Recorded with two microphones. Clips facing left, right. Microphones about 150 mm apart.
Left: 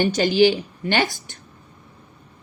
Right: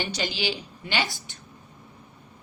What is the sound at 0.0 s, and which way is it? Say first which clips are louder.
A woman's voice: left 13 dB; 50° left (ahead or behind).